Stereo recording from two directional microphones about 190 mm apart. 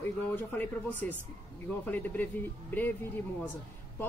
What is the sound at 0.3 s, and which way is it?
Speech, 10° left (ahead or behind).